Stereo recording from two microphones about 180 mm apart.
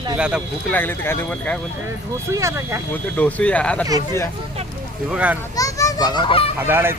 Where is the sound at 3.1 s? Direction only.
5° left (ahead or behind).